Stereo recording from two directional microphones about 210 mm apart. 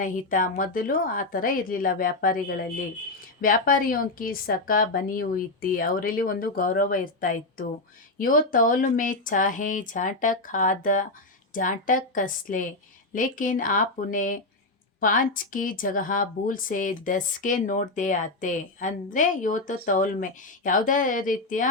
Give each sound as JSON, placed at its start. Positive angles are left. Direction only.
{"t": 0.0, "sound": "a woman's voice", "side_deg": 40}